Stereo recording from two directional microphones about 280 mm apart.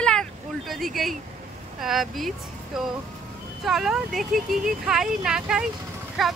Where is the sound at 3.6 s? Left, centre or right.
Centre.